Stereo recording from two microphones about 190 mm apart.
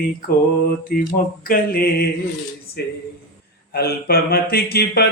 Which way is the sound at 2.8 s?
60° left (ahead or behind).